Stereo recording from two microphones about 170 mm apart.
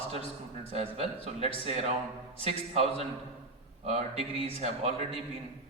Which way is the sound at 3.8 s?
35° right (ahead or behind).